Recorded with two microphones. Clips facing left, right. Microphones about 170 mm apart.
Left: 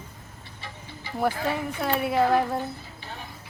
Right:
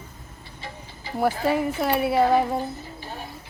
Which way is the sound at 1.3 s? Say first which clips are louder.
Right 5 dB; 35° right (ahead or behind).